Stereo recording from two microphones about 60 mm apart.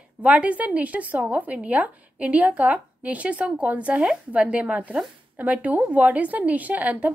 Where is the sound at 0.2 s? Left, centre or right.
Right.